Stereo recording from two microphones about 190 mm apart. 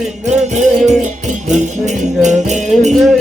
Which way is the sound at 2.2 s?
40° right (ahead or behind).